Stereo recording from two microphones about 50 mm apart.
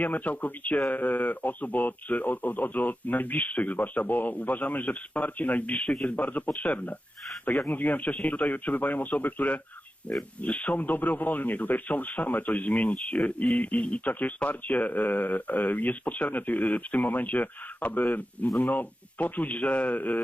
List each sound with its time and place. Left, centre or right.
0.0 s speech: left
20.0 s speech: left